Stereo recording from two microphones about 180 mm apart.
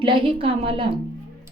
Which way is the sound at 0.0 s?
30° right (ahead or behind).